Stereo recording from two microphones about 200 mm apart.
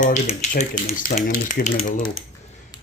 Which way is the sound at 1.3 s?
50° left (ahead or behind).